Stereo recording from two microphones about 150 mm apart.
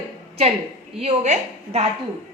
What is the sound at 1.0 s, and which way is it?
Speech, 50° right (ahead or behind).